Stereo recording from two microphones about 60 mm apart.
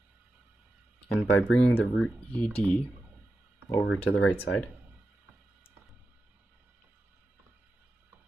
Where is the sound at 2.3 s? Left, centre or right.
Left.